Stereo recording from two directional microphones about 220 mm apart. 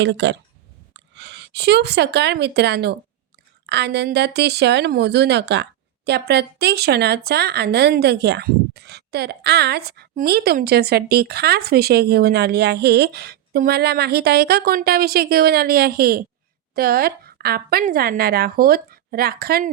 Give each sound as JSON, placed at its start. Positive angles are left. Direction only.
{"t": 0.0, "sound": "a woman's voice", "side_deg": -55}